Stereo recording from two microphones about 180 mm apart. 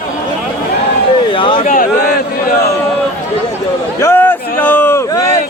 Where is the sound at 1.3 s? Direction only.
30° left (ahead or behind).